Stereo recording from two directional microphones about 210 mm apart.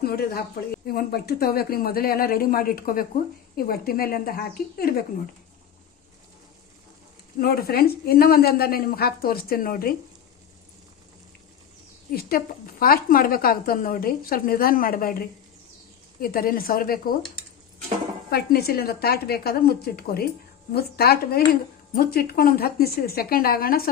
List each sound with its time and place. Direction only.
0.0 s a woman's voice: 45° left (ahead or behind)
7.4 s a woman's voice: 45° left (ahead or behind)
12.8 s a woman's voice: 45° left (ahead or behind)
18.3 s a woman's voice: 50° left (ahead or behind)